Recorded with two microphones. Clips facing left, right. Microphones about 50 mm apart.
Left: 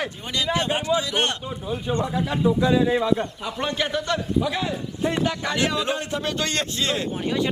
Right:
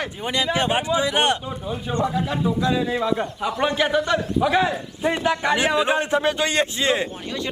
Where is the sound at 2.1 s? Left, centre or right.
Centre.